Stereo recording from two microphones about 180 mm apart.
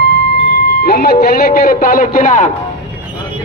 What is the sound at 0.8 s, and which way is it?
Speech, 60° left (ahead or behind).